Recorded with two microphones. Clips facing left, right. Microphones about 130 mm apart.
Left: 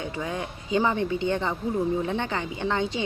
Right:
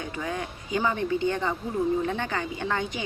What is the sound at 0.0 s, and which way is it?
A woman's voice, 25° left (ahead or behind).